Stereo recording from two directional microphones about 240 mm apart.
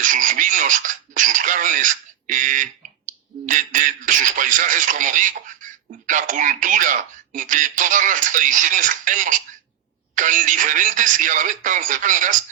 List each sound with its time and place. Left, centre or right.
0.0 s speech: right